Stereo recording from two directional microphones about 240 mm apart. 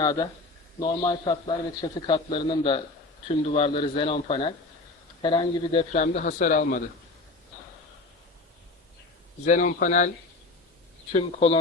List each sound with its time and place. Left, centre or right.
0.0 s a man's voice: centre; by 6.8 s left
9.5 s speech: left
11.1 s a man's voice: left